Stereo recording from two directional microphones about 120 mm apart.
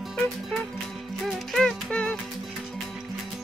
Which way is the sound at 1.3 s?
Centre (ahead or behind).